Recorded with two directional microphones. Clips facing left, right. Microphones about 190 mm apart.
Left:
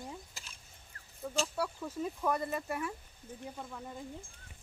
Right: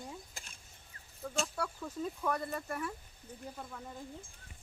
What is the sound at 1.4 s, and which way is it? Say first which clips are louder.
Speech: left 2 dB; 10° left (ahead or behind).